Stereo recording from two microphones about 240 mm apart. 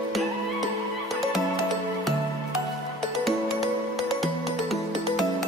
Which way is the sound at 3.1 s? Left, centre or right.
Centre.